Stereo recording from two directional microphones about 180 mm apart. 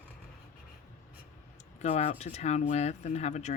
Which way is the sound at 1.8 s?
40° left (ahead or behind).